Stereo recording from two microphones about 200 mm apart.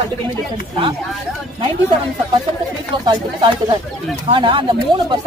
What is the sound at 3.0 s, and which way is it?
Speech, 25° right (ahead or behind).